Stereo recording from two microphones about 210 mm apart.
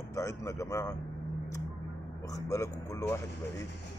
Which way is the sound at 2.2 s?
15° left (ahead or behind).